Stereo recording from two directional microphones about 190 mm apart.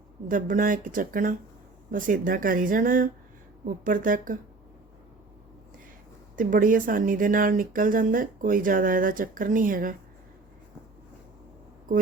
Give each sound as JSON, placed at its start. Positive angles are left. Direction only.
{"t": 0.3, "sound": "speech", "side_deg": -45}
{"t": 6.3, "sound": "speech", "side_deg": -45}